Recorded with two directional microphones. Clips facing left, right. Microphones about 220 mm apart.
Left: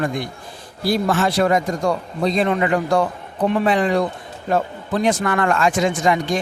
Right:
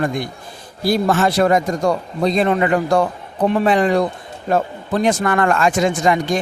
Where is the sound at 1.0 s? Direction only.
45° right (ahead or behind).